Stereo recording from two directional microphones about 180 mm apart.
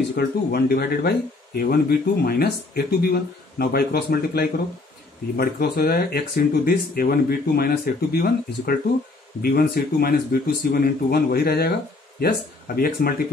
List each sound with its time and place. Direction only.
0.1 s speech: 60° left (ahead or behind)